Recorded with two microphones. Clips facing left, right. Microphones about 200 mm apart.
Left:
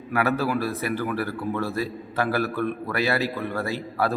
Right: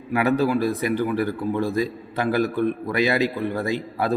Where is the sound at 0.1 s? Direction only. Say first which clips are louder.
Right 4 dB; 15° right (ahead or behind).